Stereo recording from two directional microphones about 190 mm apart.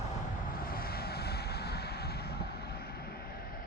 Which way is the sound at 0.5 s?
50° left (ahead or behind).